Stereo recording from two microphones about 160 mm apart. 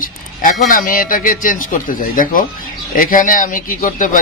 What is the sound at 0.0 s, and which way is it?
A man's voice, 60° left (ahead or behind).